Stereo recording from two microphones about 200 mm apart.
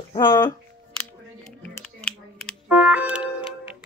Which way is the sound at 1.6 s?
5° left (ahead or behind).